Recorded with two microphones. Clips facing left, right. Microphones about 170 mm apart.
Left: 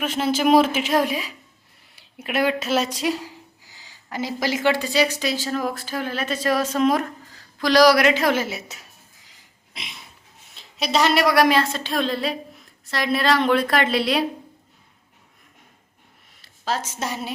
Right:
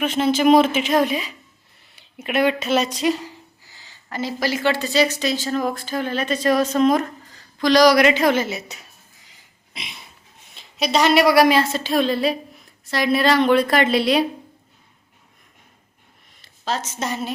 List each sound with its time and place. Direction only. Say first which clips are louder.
0.0 s speech: right 3 dB; 5° left (ahead or behind)
9.7 s a sound: right 2 dB; centre (ahead or behind)
10.5 s speech: right 2 dB; centre (ahead or behind)
16.4 s a woman's voice: even; 5° left (ahead or behind)